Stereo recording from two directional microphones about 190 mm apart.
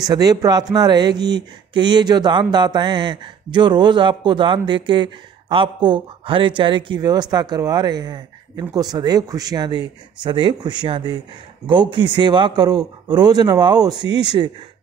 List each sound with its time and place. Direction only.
0.1 s speech: 20° right (ahead or behind)